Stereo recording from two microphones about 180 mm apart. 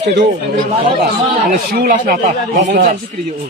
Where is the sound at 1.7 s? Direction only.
55° right (ahead or behind).